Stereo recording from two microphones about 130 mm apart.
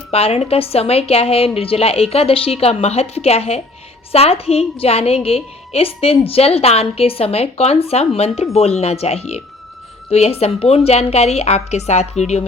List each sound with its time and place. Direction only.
0.1 s a woman's voice: 50° left (ahead or behind)